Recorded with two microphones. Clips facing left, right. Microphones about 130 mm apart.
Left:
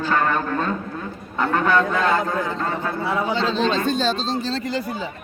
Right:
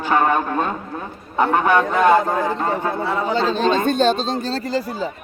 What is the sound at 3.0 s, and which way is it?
Speech, 10° left (ahead or behind).